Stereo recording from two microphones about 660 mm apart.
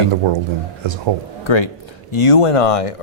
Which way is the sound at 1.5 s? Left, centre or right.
Left.